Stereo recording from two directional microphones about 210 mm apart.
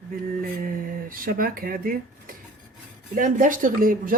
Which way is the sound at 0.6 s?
40° right (ahead or behind).